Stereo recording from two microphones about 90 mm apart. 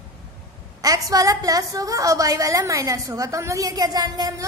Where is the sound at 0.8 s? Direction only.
40° right (ahead or behind).